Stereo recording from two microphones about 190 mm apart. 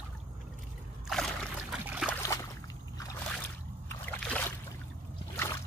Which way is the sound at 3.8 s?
10° left (ahead or behind).